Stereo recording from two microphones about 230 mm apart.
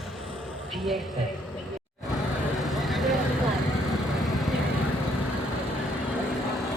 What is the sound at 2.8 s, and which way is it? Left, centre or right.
Vehicle, centre.